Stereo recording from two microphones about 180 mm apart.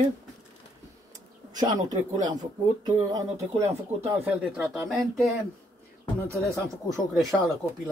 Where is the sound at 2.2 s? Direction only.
25° right (ahead or behind).